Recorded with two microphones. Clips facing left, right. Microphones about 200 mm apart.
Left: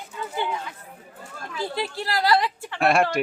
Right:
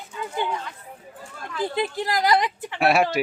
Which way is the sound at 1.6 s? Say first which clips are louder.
Right 4 dB; 20° right (ahead or behind).